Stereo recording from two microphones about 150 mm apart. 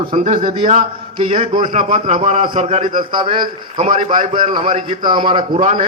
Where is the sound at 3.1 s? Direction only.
30° right (ahead or behind).